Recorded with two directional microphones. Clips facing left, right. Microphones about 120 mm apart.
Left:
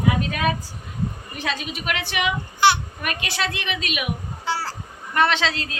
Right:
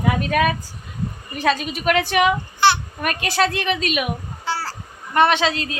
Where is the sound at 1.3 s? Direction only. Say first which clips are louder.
Right 7 dB; 45° right (ahead or behind).